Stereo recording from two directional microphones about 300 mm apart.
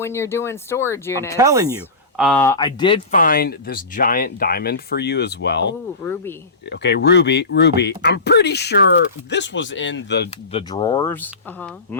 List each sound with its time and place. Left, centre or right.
0.0 s speech: centre
1.4 s speech: centre
2.1 s speech: centre
3.1 s speech: left
10.5 s speech: centre